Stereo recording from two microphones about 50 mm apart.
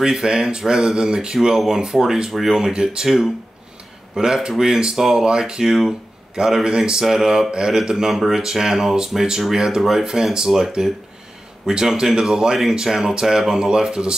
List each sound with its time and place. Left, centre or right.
0.0 s speech: centre
2.7 s speech: centre
4.1 s speech: centre